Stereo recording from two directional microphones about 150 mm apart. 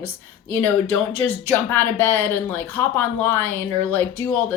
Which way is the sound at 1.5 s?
15° left (ahead or behind).